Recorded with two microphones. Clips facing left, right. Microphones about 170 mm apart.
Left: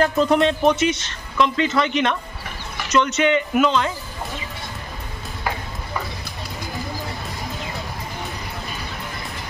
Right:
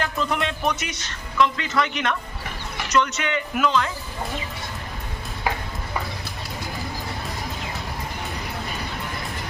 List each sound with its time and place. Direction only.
0.0 s a man's voice: 35° left (ahead or behind); by 3.9 s 20° left (ahead or behind)